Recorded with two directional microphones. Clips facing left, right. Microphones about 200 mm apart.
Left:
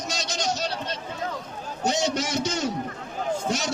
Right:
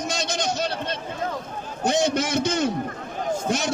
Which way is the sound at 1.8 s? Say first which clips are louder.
Right 3 dB; 55° right (ahead or behind).